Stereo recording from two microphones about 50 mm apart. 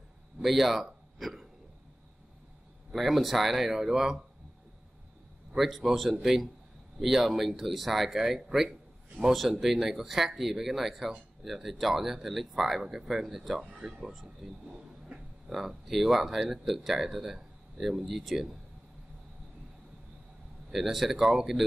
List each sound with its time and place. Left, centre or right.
0.4 s speech: centre
1.2 s hiccup: centre
2.9 s speech: centre
5.6 s a man's voice: centre
14.4 s speech: centre
15.0 s a sound: centre
15.9 s speech: centre
20.7 s speech: centre